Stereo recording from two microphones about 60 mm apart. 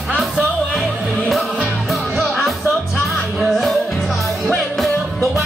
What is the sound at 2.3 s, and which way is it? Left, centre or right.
Music, centre.